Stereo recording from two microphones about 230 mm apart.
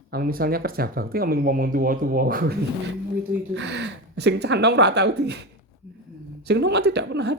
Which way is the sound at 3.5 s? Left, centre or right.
Right.